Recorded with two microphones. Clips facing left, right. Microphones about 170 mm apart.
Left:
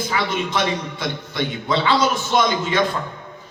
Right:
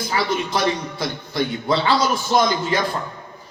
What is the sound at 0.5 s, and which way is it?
Speech, 35° right (ahead or behind).